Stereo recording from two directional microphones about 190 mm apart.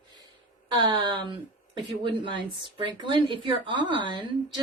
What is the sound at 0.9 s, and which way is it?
Speech, 25° right (ahead or behind).